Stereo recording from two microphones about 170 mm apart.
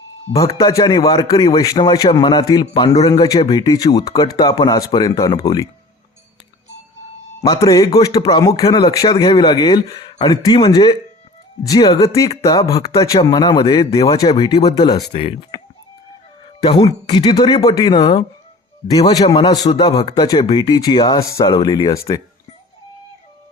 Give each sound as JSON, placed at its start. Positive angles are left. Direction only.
{"t": 0.3, "sound": "a man's voice", "side_deg": 20}
{"t": 7.4, "sound": "a man's voice", "side_deg": 25}
{"t": 16.7, "sound": "a man's voice", "side_deg": 30}